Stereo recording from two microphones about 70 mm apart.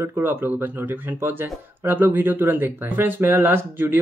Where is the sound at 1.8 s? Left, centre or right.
Right.